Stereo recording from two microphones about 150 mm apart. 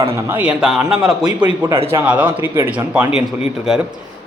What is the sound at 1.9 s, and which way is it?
Speech, 15° right (ahead or behind).